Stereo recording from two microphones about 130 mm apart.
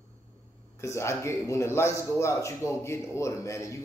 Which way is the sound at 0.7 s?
20° left (ahead or behind).